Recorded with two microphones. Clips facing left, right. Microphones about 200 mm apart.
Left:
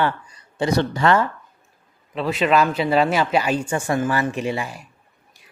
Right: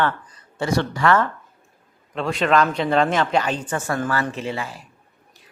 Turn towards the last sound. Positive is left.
turn(degrees=15)  # may be behind; listen again after turning